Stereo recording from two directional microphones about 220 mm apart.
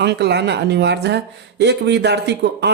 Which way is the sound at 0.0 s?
50° right (ahead or behind).